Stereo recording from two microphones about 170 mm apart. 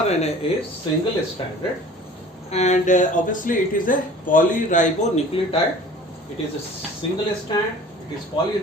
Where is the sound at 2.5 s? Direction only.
40° left (ahead or behind).